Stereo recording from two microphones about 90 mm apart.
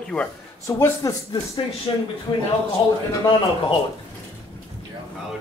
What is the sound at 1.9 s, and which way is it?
Speech, 70° left (ahead or behind).